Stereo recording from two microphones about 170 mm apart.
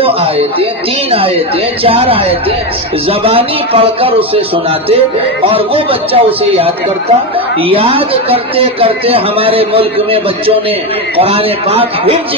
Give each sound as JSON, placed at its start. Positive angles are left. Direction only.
{"t": 0.0, "sound": "a woman's voice", "side_deg": -35}
{"t": 1.9, "sound": "a woman's voice", "side_deg": -35}
{"t": 5.5, "sound": "a woman's voice", "side_deg": -35}